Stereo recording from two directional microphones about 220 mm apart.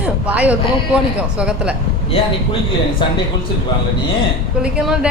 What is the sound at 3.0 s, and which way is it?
Speech, 20° left (ahead or behind).